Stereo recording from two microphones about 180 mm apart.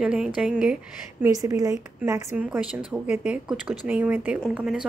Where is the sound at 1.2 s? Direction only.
20° right (ahead or behind).